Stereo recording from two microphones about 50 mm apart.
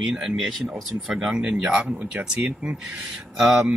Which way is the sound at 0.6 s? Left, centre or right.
Centre.